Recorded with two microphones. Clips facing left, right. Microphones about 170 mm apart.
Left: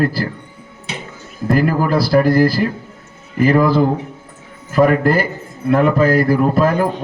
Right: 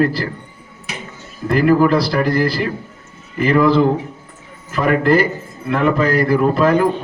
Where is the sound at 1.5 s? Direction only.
40° left (ahead or behind).